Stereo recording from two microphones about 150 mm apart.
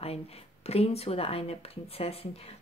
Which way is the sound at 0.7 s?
45° left (ahead or behind).